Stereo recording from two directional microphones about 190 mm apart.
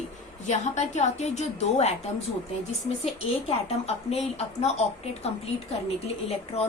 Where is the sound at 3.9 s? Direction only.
35° left (ahead or behind).